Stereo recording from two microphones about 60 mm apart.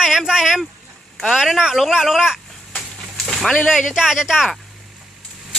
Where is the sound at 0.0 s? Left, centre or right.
Centre.